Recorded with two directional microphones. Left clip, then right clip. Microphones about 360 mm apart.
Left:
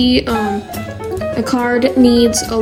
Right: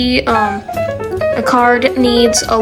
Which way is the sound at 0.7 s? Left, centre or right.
Centre.